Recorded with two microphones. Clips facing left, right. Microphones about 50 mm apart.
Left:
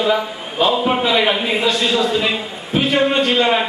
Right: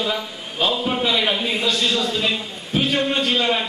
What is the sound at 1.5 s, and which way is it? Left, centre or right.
A man's voice, centre.